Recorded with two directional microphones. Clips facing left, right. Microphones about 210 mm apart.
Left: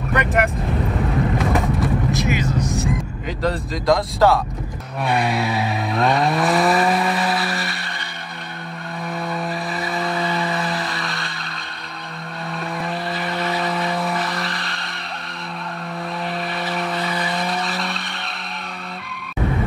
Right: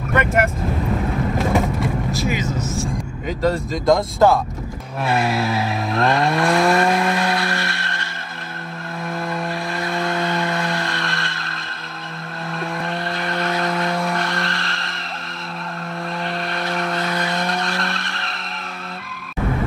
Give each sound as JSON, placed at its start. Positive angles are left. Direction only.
{"t": 0.1, "sound": "vehicle", "side_deg": 0}
{"t": 1.5, "sound": "vehicle", "side_deg": 0}
{"t": 2.6, "sound": "music", "side_deg": 15}
{"t": 3.4, "sound": "speech", "side_deg": 0}
{"t": 5.0, "sound": "vehicle", "side_deg": 0}
{"t": 9.3, "sound": "vehicle", "side_deg": 0}
{"t": 12.5, "sound": "vehicle", "side_deg": 0}
{"t": 16.3, "sound": "skidding", "side_deg": 0}